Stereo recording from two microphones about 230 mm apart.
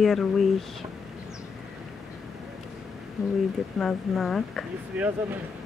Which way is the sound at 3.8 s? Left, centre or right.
Centre.